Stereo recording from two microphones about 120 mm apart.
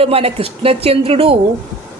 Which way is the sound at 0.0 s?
55° right (ahead or behind).